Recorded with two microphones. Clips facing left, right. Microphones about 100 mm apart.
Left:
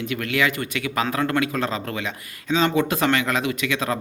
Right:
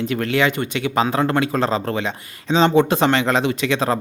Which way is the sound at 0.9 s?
25° right (ahead or behind).